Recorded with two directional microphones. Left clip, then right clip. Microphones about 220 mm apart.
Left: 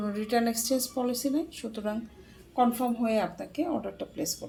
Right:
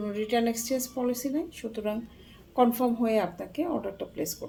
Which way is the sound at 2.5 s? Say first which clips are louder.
Right 2 dB; 15° right (ahead or behind).